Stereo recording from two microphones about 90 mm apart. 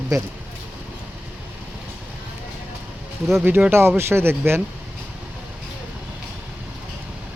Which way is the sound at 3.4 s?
25° right (ahead or behind).